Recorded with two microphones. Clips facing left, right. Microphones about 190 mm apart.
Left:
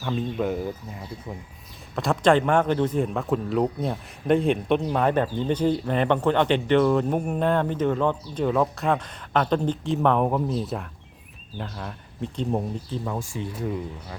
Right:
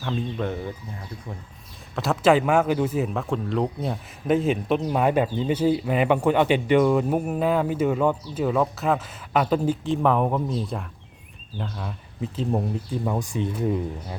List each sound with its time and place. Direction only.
0.0 s speech: 5° left (ahead or behind)
2.0 s speech: 5° right (ahead or behind)
12.9 s speech: 15° right (ahead or behind)